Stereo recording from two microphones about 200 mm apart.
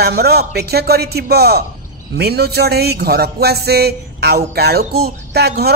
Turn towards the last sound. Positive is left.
turn(degrees=-55)  # may be behind; listen again after turning